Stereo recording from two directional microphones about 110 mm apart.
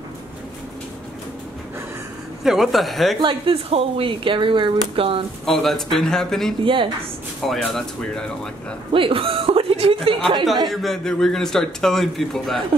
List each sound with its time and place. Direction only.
2.4 s a man's voice: 5° right (ahead or behind)
3.2 s speech: 50° right (ahead or behind)
5.4 s a man's voice: 5° left (ahead or behind)
6.6 s speech: 50° right (ahead or behind)
7.4 s a man's voice: 5° left (ahead or behind)
8.9 s speech: 55° right (ahead or behind)
10.7 s a man's voice: centre (ahead or behind)